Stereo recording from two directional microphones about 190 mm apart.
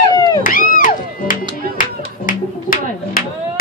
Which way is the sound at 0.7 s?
45° left (ahead or behind).